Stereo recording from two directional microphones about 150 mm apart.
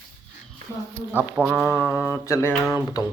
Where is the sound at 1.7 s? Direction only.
10° right (ahead or behind).